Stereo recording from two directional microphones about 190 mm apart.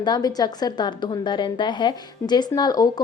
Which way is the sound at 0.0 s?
20° left (ahead or behind).